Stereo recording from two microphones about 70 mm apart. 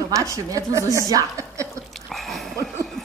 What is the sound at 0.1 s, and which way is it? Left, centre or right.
A woman's voice, right.